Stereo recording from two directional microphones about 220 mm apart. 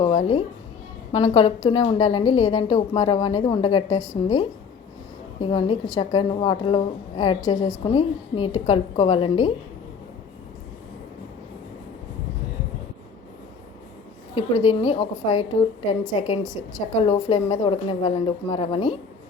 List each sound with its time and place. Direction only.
0.0 s music: 25° left (ahead or behind)
1.1 s a woman's voice: 25° left (ahead or behind)
5.4 s a woman's voice: 25° left (ahead or behind)
14.3 s a woman's voice: 25° left (ahead or behind)